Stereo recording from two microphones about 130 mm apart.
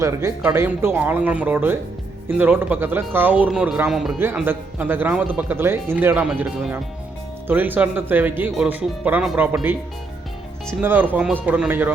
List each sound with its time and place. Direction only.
0.0 s speech: 25° right (ahead or behind); by 4.2 s centre (ahead or behind)
4.4 s speech: 15° right (ahead or behind)
10.8 s speech: 15° right (ahead or behind)